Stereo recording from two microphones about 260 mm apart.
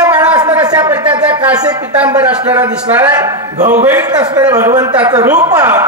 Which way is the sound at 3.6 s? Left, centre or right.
Right.